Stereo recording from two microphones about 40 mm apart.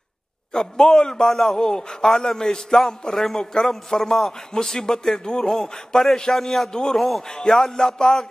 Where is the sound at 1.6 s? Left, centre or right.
Centre.